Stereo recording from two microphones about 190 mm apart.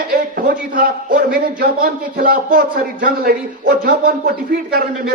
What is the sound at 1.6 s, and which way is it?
A man's voice, 45° right (ahead or behind).